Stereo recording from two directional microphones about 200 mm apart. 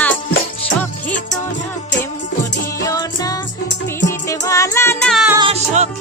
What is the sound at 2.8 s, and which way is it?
Music, 20° left (ahead or behind).